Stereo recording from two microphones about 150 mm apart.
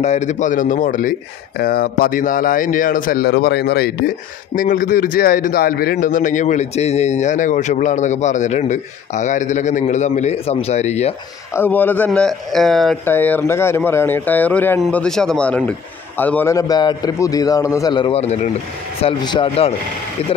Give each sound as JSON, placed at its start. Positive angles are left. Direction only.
{"t": 0.0, "sound": "a man's voice", "side_deg": 50}
{"t": 1.6, "sound": "speech", "side_deg": 85}
{"t": 4.6, "sound": "a man's voice", "side_deg": 65}
{"t": 11.5, "sound": "a man's voice", "side_deg": 10}
{"t": 13.0, "sound": "speech", "side_deg": 15}
{"t": 16.5, "sound": "a man's voice", "side_deg": 25}
{"t": 18.2, "sound": "a man's voice", "side_deg": 50}
{"t": 18.9, "sound": "speech", "side_deg": 35}